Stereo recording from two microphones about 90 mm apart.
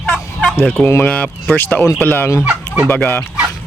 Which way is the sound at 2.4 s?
15° right (ahead or behind).